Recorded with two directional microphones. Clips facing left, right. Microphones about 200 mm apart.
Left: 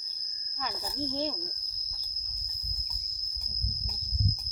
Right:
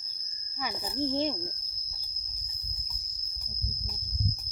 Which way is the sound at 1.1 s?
20° right (ahead or behind).